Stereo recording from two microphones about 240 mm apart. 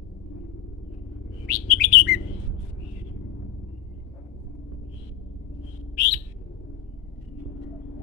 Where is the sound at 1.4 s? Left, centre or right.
Left.